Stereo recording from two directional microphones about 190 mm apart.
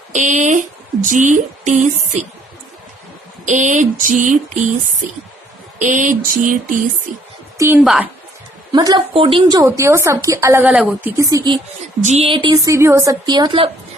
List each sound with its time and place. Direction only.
0.1 s speech: 40° right (ahead or behind)
1.0 s a sound: 40° right (ahead or behind)
3.4 s a sound: 40° right (ahead or behind)
7.6 s a woman's voice: 5° right (ahead or behind)
8.7 s a woman's voice: 20° right (ahead or behind)
12.0 s a woman's voice: 35° right (ahead or behind)
12.7 s a woman's voice: 15° right (ahead or behind)